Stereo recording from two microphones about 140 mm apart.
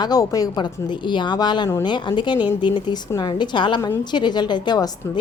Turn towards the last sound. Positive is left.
turn(degrees=30)  # may be behind; listen again after turning